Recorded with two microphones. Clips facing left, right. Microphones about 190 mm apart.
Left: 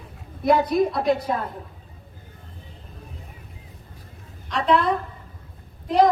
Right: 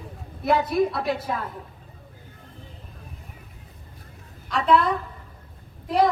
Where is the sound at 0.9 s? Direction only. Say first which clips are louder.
Left 5 dB; 45° left (ahead or behind).